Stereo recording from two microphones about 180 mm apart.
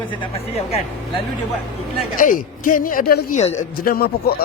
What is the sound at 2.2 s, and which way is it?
A man's voice, 45° left (ahead or behind).